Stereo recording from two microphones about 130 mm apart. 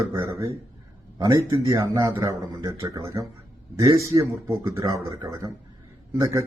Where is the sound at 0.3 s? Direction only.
30° right (ahead or behind).